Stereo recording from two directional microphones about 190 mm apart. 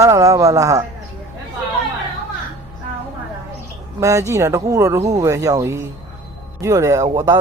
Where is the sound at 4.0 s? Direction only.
15° right (ahead or behind).